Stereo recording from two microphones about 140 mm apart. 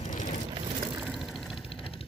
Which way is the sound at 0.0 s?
65° left (ahead or behind).